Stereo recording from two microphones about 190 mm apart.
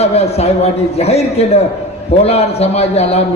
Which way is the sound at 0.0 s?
35° left (ahead or behind).